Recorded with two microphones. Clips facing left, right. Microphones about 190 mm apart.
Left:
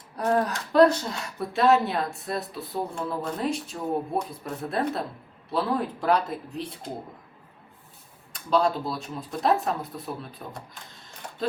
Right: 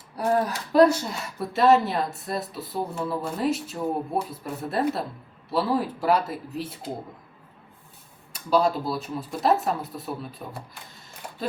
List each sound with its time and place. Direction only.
0.2 s speech: 10° right (ahead or behind)
8.3 s speech: 5° right (ahead or behind)